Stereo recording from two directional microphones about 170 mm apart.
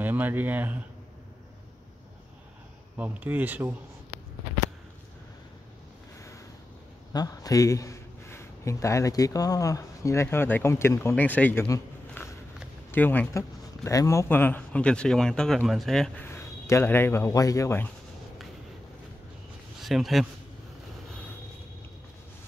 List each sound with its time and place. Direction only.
0.0 s speech: 10° right (ahead or behind)
3.0 s speech: 10° right (ahead or behind)
7.1 s a man's voice: 20° left (ahead or behind); by 16.3 s 5° left (ahead or behind)
16.3 s speech: 15° left (ahead or behind)
19.8 s speech: centre (ahead or behind)